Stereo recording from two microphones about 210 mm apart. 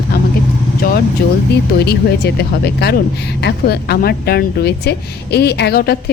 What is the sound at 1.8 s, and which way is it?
Speech, 50° left (ahead or behind).